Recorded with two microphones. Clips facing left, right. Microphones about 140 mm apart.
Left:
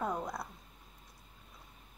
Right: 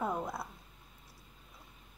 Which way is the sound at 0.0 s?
5° right (ahead or behind).